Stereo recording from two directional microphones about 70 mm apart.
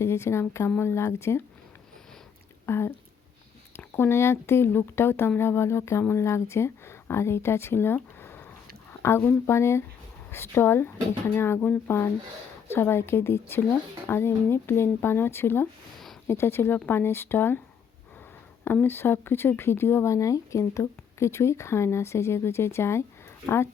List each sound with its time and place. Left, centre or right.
0.0 s speech: left
2.6 s speech: left
8.2 s a sound: left
9.0 s speech: left
18.6 s speech: left
20.1 s speech: left